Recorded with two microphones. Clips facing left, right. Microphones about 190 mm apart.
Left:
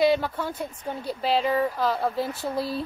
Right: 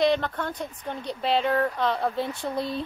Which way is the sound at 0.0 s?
5° left (ahead or behind).